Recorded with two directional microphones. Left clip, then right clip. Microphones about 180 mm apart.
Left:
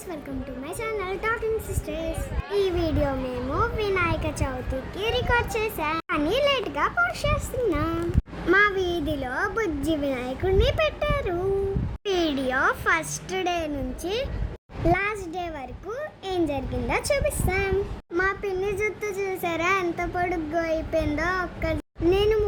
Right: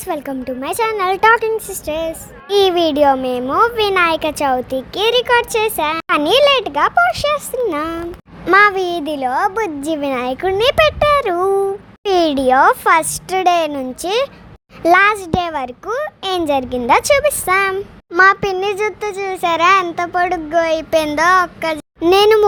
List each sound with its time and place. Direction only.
0.1 s a child's voice: 50° right (ahead or behind)